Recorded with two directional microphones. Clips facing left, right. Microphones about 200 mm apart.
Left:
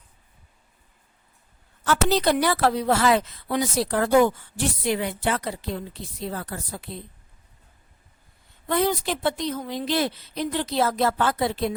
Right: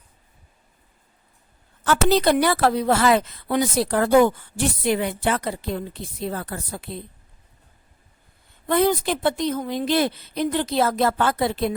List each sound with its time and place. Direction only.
1.8 s a woman's voice: 55° right (ahead or behind)
8.7 s a woman's voice: 55° right (ahead or behind)